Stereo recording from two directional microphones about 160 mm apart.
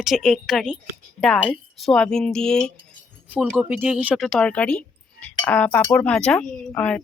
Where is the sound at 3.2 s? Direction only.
10° right (ahead or behind).